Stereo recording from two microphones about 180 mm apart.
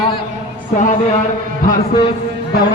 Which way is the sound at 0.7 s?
45° left (ahead or behind).